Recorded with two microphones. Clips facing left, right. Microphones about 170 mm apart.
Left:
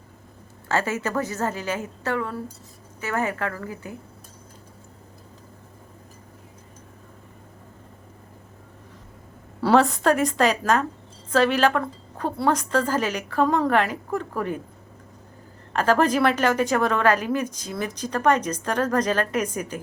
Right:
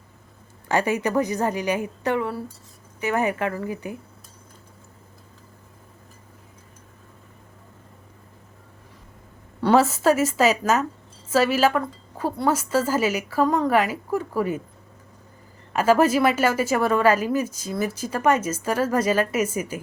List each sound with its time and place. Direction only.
0.7 s speech: 15° right (ahead or behind)
9.6 s a woman's voice: centre (ahead or behind)
15.7 s speech: 10° right (ahead or behind)